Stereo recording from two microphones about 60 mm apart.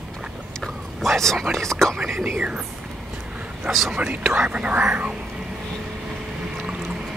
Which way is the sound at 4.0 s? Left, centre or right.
Right.